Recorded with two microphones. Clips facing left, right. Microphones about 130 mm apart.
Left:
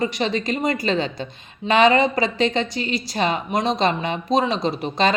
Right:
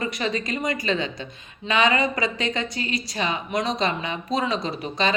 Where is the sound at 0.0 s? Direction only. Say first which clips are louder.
Left 4 dB; 25° left (ahead or behind).